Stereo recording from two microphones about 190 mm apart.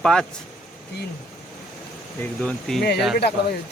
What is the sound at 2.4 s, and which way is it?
Speech, centre (ahead or behind).